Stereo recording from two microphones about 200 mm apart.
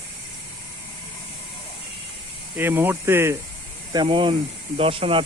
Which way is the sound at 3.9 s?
20° right (ahead or behind).